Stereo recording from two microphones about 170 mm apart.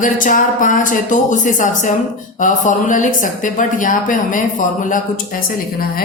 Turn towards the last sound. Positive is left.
turn(degrees=60)  # may be behind; listen again after turning